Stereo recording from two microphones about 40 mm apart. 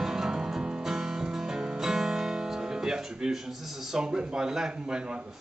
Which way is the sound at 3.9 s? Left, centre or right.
Centre.